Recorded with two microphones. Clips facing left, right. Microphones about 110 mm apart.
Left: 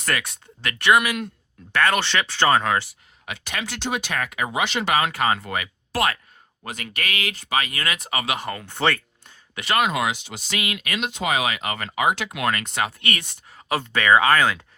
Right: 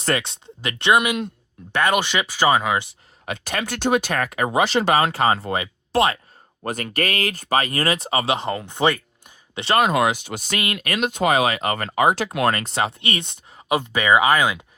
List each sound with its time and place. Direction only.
0.0 s speech: 25° right (ahead or behind); by 2.8 s 10° right (ahead or behind)
3.2 s speech: 40° right (ahead or behind)
6.6 s speech: 45° right (ahead or behind); by 9.3 s 15° right (ahead or behind)
9.6 s speech: 35° right (ahead or behind); by 14.7 s 15° right (ahead or behind)